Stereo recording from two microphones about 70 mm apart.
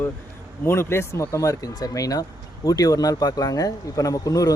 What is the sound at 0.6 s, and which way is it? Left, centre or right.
Speech, left.